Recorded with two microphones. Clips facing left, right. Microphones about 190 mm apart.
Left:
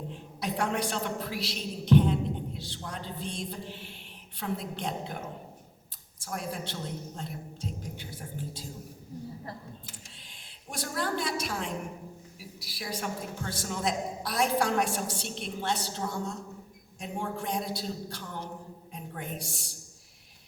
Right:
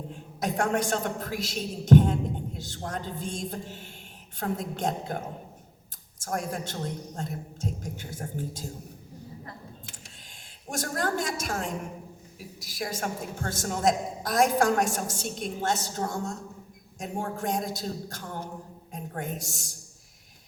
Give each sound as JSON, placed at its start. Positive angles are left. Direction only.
{"t": 0.3, "sound": "a woman's voice", "side_deg": -45}
{"t": 10.7, "sound": "a woman's voice", "side_deg": -45}